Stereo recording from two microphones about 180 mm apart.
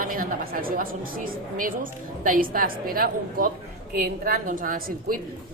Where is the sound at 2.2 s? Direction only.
50° right (ahead or behind).